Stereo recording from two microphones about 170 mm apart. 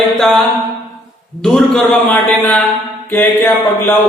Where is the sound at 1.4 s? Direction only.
5° left (ahead or behind).